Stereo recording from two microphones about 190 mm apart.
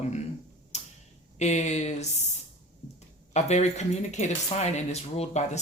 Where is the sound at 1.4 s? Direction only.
35° left (ahead or behind).